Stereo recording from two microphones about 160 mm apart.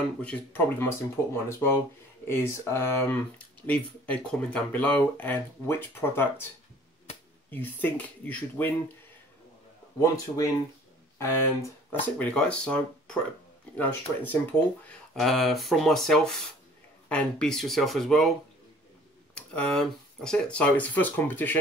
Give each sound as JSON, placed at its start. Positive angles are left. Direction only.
{"t": 0.2, "sound": "speech", "side_deg": 10}
{"t": 7.5, "sound": "speech", "side_deg": 10}
{"t": 9.9, "sound": "speech", "side_deg": 20}
{"t": 19.3, "sound": "speech", "side_deg": 5}